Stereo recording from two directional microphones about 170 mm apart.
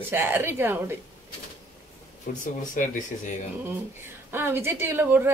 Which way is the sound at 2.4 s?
50° left (ahead or behind).